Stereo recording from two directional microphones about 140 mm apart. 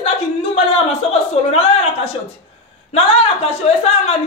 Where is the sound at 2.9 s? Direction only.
45° left (ahead or behind).